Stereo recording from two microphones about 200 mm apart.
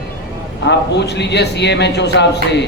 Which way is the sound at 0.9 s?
60° left (ahead or behind).